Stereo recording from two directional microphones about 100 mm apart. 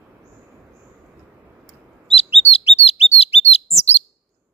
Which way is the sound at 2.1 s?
90° left.